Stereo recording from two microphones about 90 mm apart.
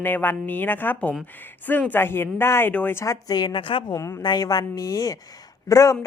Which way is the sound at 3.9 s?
40° left (ahead or behind).